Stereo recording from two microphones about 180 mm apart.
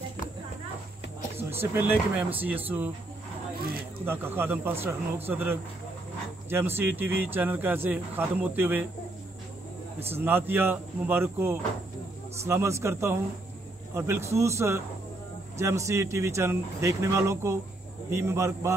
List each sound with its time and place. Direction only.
1.5 s speech: 15° right (ahead or behind)
4.0 s speech: 10° right (ahead or behind)
10.0 s speech: 10° right (ahead or behind)